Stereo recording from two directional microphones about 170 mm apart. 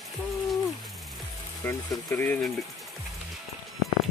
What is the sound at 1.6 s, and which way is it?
Speech, 10° left (ahead or behind).